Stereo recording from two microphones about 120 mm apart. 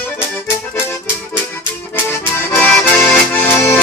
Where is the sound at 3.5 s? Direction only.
20° left (ahead or behind).